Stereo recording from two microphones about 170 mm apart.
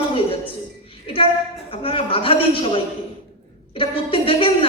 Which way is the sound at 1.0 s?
30° left (ahead or behind).